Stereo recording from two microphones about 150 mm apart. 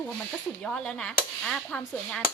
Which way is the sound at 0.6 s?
5° left (ahead or behind).